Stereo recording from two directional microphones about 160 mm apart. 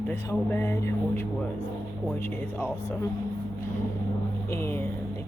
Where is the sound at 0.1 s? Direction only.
15° left (ahead or behind).